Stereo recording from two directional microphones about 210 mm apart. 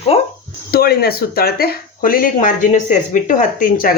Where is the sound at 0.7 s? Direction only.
45° left (ahead or behind).